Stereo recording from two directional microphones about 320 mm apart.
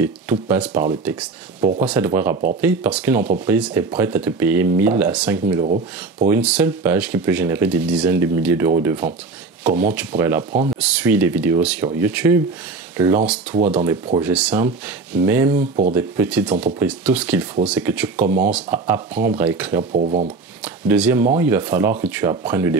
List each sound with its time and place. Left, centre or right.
0.0 s speech: centre
5.6 s speech: right
6.2 s speech: centre
15.5 s speech: right
15.9 s speech: centre
18.2 s speech: right
18.5 s speech: centre
19.8 s speech: right
20.6 s speech: centre